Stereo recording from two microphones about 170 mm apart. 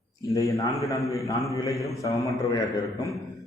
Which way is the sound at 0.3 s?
20° left (ahead or behind).